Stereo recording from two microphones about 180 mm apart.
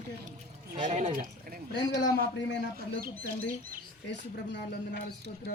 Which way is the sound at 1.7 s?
80° left.